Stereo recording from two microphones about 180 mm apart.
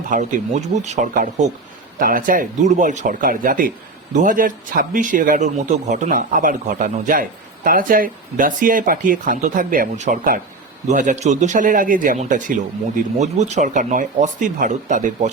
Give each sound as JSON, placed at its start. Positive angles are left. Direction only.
{"t": 0.1, "sound": "a man's voice", "side_deg": -45}